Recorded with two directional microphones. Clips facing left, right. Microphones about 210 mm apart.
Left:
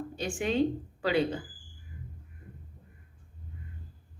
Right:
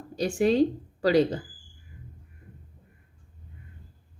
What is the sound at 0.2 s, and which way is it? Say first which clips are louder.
Speech: right 6 dB; 40° right (ahead or behind).